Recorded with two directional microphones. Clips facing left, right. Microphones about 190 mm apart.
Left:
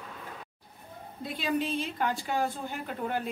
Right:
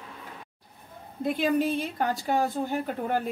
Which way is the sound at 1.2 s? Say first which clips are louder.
Right 6 dB; 50° right (ahead or behind).